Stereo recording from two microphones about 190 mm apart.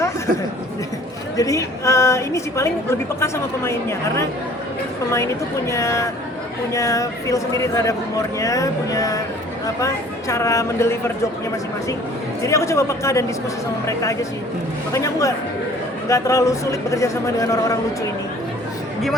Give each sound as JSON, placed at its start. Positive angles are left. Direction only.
{"t": 1.4, "sound": "a woman's voice", "side_deg": 15}
{"t": 12.4, "sound": "a woman's voice", "side_deg": 15}